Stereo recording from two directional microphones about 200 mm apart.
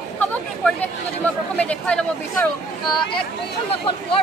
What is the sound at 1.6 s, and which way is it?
Speech, 5° left (ahead or behind).